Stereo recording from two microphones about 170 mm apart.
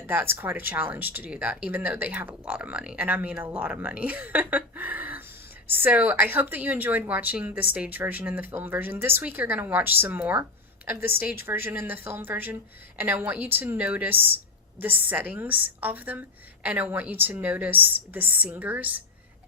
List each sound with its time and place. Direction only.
0.1 s speech: 10° right (ahead or behind)
11.4 s speech: 10° right (ahead or behind)